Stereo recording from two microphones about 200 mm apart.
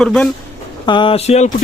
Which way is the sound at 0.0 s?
5° left (ahead or behind).